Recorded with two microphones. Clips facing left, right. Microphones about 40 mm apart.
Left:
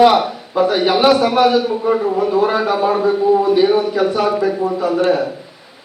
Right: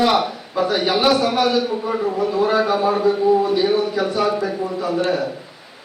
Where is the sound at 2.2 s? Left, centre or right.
Left.